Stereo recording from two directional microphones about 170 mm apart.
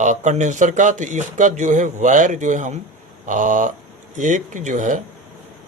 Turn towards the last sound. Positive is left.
turn(degrees=-45)  # may be behind; listen again after turning